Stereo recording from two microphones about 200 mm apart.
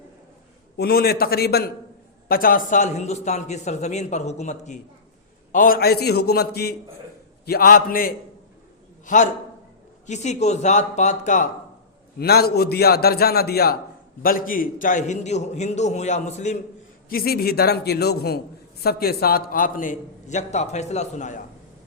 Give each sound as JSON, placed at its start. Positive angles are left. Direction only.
{"t": 0.8, "sound": "a man's voice", "side_deg": 50}
{"t": 12.2, "sound": "a man's voice", "side_deg": 50}
{"t": 17.1, "sound": "a man's voice", "side_deg": 50}